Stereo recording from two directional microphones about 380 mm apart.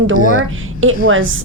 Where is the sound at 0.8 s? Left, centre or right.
Right.